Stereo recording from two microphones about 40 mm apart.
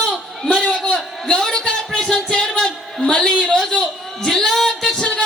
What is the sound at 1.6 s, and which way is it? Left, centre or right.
Music, left.